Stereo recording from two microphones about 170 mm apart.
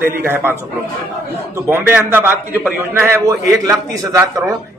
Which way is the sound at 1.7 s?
15° right (ahead or behind).